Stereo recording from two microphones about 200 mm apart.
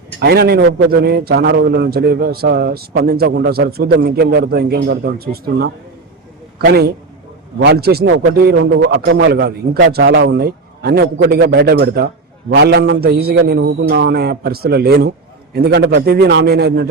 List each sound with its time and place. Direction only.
0.2 s a man's voice: 50° right (ahead or behind)
9.9 s a man's voice: 70° right (ahead or behind); by 16.9 s 55° right (ahead or behind)